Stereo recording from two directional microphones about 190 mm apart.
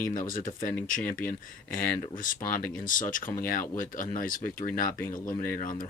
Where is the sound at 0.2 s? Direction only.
45° left (ahead or behind).